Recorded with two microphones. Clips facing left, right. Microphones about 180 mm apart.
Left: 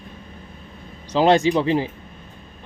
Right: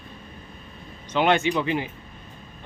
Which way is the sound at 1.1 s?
35° left (ahead or behind).